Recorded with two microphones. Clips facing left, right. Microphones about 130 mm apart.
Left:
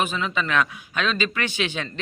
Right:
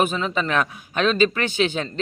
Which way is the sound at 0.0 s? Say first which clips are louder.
Right 3 dB; 45° right (ahead or behind).